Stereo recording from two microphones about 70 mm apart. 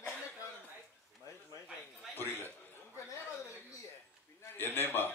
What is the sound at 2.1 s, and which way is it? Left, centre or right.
Speech, left.